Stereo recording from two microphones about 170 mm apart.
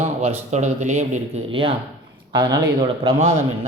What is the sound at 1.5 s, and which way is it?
Speech, 30° right (ahead or behind).